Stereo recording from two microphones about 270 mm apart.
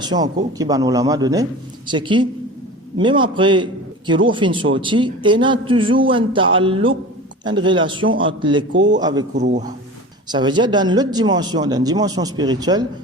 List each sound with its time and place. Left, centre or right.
0.0 s a man's voice: centre
8.0 s a man's voice: right
8.3 s speech: centre
8.7 s a man's voice: right
9.0 s speech: centre
9.3 s a man's voice: right
10.2 s speech: centre